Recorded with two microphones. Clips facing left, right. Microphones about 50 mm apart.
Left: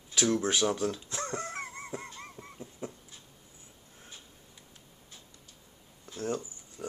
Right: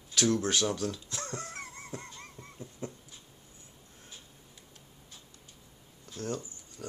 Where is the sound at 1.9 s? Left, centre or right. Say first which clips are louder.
Left 3 dB; centre.